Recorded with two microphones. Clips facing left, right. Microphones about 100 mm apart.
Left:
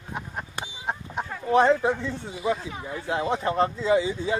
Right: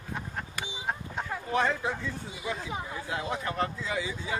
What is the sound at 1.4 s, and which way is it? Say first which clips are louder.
Speech: left 9 dB; 30° left (ahead or behind).